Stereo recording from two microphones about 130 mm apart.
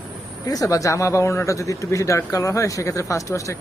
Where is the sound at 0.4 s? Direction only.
25° left (ahead or behind).